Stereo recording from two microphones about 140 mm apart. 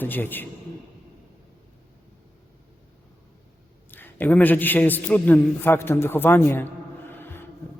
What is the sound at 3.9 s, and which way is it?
A man's voice, 15° left (ahead or behind).